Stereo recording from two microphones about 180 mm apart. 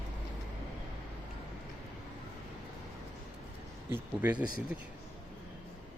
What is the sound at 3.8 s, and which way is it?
Speech, 10° right (ahead or behind).